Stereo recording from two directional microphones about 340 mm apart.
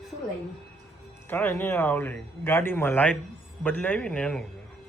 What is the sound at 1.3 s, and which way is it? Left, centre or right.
Speech, centre.